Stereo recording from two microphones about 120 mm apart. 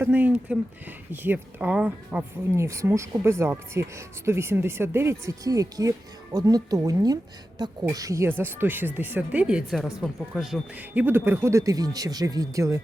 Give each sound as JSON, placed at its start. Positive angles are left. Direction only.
{"t": 0.0, "sound": "speech", "side_deg": -15}
{"t": 2.6, "sound": "speech", "side_deg": -25}
{"t": 10.8, "sound": "speech", "side_deg": -15}